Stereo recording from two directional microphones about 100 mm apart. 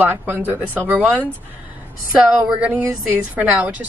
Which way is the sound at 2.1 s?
5° right (ahead or behind).